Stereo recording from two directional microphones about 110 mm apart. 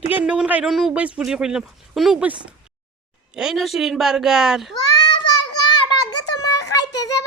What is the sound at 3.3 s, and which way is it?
A woman's voice, 5° right (ahead or behind).